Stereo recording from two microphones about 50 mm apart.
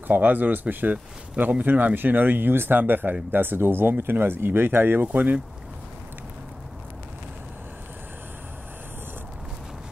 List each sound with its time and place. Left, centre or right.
0.1 s speech: right